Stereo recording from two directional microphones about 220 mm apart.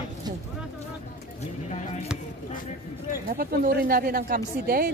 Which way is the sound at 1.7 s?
30° left (ahead or behind).